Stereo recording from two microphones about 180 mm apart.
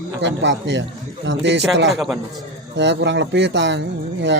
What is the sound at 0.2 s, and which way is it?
A man's voice, 85° right.